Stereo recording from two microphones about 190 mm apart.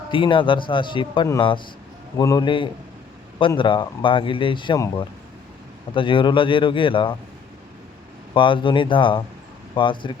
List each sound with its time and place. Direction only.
0.1 s a man's voice: 25° left (ahead or behind)
8.3 s a man's voice: 25° left (ahead or behind)